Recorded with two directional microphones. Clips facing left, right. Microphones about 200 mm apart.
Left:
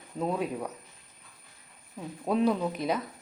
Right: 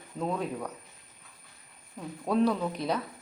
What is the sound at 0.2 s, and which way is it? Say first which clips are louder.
Speech: left 2 dB; 10° left (ahead or behind).